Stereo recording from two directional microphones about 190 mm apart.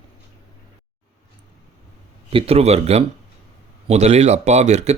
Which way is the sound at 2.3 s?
30° right (ahead or behind).